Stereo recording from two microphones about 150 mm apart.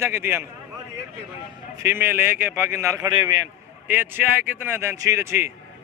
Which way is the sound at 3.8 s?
15° right (ahead or behind).